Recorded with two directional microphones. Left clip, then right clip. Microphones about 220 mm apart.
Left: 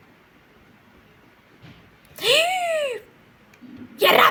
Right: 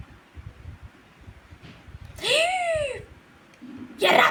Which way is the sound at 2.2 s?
25° left (ahead or behind).